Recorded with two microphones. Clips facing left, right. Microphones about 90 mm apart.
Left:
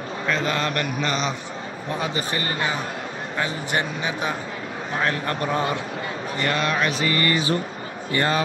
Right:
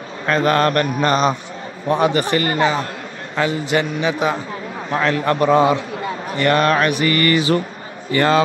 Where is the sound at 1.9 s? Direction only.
65° right (ahead or behind); by 2.9 s 90° right.